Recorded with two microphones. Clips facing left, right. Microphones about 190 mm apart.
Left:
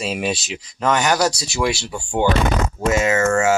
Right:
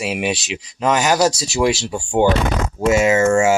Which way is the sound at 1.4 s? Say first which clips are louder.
Right 4 dB; 40° right (ahead or behind).